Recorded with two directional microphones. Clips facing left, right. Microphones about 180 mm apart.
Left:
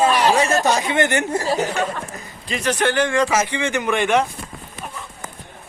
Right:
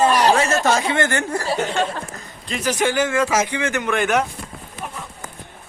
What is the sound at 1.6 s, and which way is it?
A man's voice, centre (ahead or behind).